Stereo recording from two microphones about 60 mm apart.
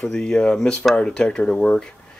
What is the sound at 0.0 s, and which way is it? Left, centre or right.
Speech, centre.